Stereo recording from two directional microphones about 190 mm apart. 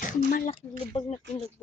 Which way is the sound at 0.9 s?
30° left (ahead or behind).